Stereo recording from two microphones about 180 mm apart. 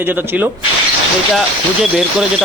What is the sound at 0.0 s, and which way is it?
Speech, 10° right (ahead or behind).